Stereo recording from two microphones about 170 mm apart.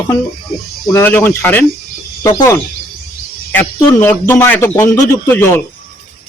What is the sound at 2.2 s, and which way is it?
A man's voice, 20° left (ahead or behind).